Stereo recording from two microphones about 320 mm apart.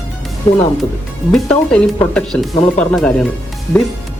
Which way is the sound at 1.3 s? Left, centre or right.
Centre.